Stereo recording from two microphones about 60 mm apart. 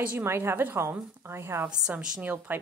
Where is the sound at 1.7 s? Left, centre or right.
Centre.